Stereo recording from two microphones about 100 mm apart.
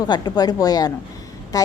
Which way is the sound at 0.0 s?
45° left (ahead or behind).